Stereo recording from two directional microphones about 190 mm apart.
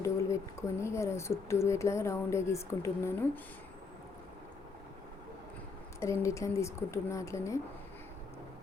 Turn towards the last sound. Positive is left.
turn(degrees=15)  # may be behind; listen again after turning